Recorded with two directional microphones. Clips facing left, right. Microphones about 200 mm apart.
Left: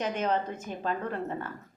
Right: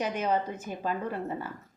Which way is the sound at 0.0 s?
10° right (ahead or behind).